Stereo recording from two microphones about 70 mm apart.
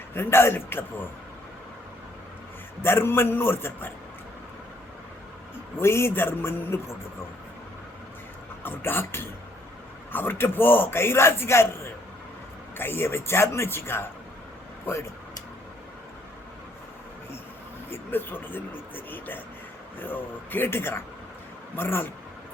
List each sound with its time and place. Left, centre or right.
0.1 s a man's voice: left
2.8 s a man's voice: left
5.8 s a man's voice: left
8.6 s a man's voice: left
17.9 s a man's voice: left